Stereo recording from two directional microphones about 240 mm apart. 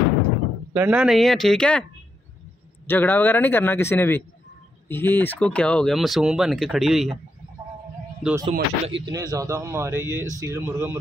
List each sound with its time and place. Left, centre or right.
0.7 s speech: centre
2.9 s speech: centre
8.2 s speech: centre
8.5 s speech: right
9.1 s speech: centre